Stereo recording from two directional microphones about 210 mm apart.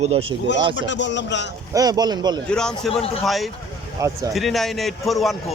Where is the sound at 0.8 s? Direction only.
60° left (ahead or behind).